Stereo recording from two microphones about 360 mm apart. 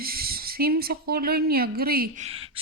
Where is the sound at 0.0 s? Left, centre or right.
Right.